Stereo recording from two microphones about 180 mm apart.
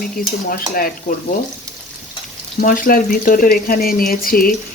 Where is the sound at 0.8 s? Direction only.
50° left (ahead or behind).